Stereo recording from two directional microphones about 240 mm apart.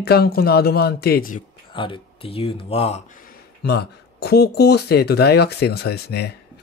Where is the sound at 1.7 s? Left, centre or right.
Left.